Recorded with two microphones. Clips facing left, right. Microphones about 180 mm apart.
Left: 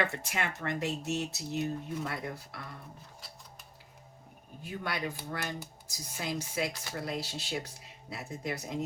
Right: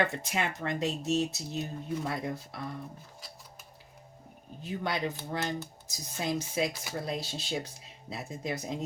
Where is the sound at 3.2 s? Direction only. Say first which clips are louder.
Right 2 dB; centre (ahead or behind).